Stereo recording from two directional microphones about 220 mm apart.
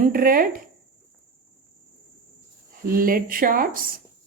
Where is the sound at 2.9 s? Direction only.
40° right (ahead or behind).